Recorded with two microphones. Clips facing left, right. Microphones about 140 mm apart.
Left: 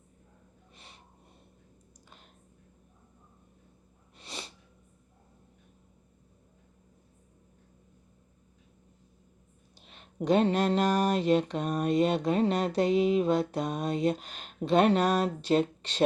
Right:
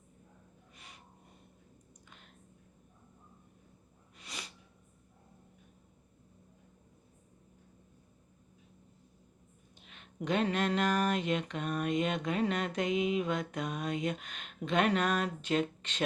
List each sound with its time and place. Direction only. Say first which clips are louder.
0.8 s snort: left 1 dB; 30° left (ahead or behind)
4.2 s sneeze: left 4 dB; 30° left (ahead or behind)
9.7 s speech: left 6 dB; 35° left (ahead or behind)